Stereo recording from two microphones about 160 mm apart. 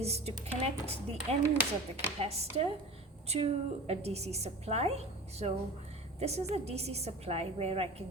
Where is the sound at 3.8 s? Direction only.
40° right (ahead or behind).